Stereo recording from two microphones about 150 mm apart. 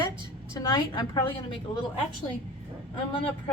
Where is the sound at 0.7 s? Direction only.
30° left (ahead or behind).